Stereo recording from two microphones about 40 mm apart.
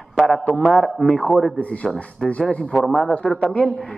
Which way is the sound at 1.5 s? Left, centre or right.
Left.